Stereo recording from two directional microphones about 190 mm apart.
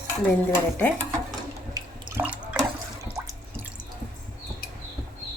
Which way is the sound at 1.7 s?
10° right (ahead or behind).